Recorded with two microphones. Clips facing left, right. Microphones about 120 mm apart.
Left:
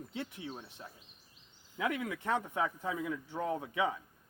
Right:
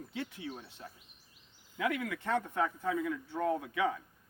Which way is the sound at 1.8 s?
25° left (ahead or behind).